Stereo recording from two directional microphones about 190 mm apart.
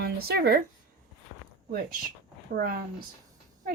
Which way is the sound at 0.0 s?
55° right (ahead or behind).